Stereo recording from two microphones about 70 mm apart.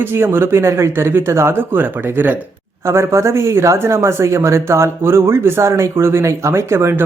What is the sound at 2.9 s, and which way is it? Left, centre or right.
A man's voice, right.